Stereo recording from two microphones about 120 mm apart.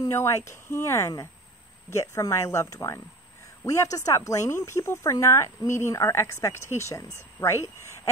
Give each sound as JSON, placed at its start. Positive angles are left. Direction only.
{"t": 0.0, "sound": "speech", "side_deg": 25}